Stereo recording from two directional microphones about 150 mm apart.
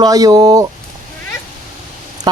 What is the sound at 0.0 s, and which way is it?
Speech, 25° right (ahead or behind).